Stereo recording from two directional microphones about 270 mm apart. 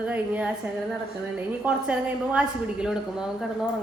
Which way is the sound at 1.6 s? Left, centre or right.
Centre.